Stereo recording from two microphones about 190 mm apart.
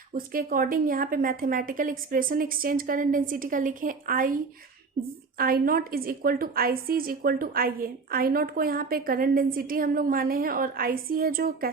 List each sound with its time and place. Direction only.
0.1 s a woman's voice: 50° right (ahead or behind)
5.4 s a woman's voice: 50° right (ahead or behind)